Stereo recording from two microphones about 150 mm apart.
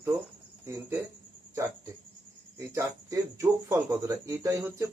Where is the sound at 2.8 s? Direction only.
20° right (ahead or behind).